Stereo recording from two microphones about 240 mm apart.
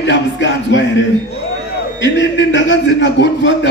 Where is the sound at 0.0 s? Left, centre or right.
Left.